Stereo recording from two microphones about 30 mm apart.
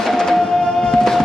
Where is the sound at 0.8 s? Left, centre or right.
Left.